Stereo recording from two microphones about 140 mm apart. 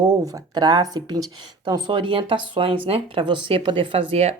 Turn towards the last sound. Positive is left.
turn(degrees=-45)  # may be behind; listen again after turning